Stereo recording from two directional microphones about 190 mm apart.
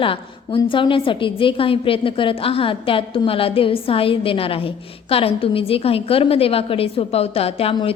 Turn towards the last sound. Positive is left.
turn(degrees=30)  # may be behind; listen again after turning